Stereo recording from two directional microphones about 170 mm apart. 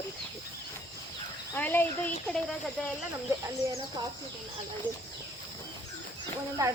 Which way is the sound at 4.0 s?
25° right (ahead or behind).